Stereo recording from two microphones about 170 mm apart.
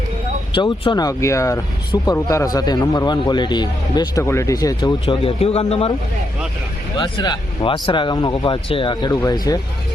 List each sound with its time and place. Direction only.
0.5 s a man's voice: 30° left (ahead or behind)
5.0 s a man's voice: 35° left (ahead or behind)
7.0 s a man's voice: 25° left (ahead or behind)